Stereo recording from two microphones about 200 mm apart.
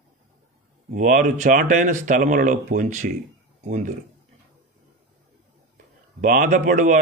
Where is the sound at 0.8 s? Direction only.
40° right (ahead or behind).